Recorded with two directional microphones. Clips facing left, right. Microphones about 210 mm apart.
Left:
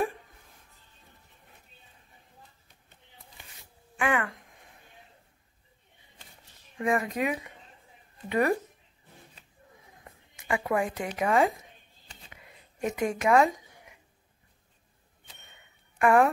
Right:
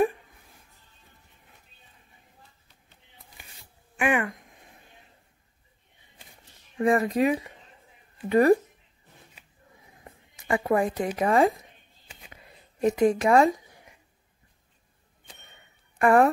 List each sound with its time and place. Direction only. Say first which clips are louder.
4.0 s a sound: right 3 dB; 20° right (ahead or behind)
6.8 s speech: right 6 dB; 35° right (ahead or behind)
10.0 s a sound: right 3 dB; 35° right (ahead or behind)
11.1 s speech: right 3 dB; 35° right (ahead or behind)
12.8 s speech: right 6 dB; 35° right (ahead or behind)
16.0 s speech: right 2 dB; 35° right (ahead or behind)